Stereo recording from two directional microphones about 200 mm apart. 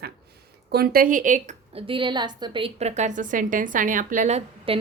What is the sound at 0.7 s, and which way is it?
A woman's voice, 50° right (ahead or behind).